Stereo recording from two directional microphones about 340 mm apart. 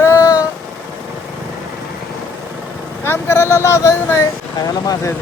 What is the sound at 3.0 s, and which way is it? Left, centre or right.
Speech, centre.